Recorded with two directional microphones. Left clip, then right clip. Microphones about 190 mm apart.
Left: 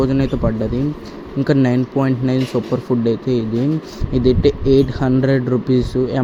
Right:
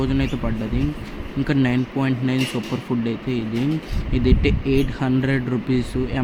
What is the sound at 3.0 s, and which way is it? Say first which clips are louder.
Speech: left 8 dB; 20° left (ahead or behind).